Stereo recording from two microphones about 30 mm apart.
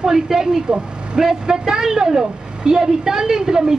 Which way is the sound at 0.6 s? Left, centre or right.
Right.